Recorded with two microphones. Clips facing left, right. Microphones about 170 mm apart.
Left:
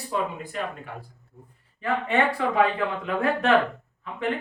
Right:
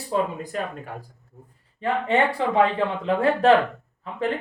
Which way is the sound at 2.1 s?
30° right (ahead or behind).